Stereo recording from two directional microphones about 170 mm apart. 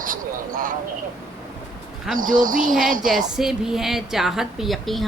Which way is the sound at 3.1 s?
Centre (ahead or behind).